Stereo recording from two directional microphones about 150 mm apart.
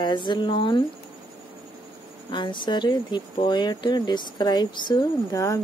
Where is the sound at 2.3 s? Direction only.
30° left (ahead or behind).